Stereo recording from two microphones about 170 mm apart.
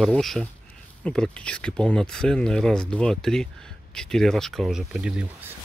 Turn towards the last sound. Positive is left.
turn(degrees=-5)  # may be behind; listen again after turning